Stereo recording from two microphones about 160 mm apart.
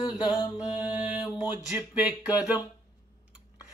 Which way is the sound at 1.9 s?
10° right (ahead or behind).